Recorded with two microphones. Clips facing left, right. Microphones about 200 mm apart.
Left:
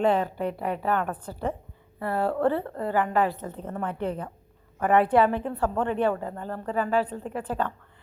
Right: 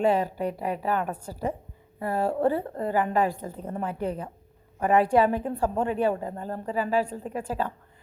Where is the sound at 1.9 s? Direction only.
15° right (ahead or behind).